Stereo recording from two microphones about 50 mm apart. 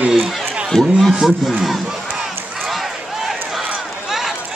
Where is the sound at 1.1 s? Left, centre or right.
Centre.